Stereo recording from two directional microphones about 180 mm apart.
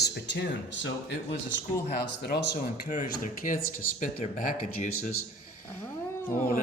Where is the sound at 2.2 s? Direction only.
65° left (ahead or behind).